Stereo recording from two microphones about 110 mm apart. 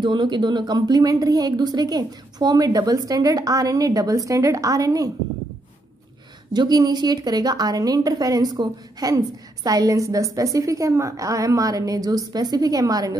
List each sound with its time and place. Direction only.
0.0 s a woman's voice: 45° right (ahead or behind)
6.5 s a woman's voice: 40° right (ahead or behind)